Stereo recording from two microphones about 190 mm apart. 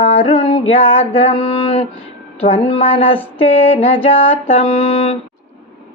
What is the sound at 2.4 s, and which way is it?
Speech, 30° left (ahead or behind).